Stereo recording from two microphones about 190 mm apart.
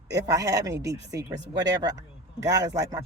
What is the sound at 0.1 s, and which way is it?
A man's voice, 20° right (ahead or behind).